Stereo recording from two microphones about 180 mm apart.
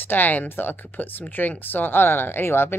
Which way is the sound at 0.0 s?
10° left (ahead or behind).